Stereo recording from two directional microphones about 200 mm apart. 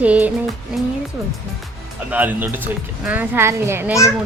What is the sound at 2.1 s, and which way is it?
Speech, 10° right (ahead or behind).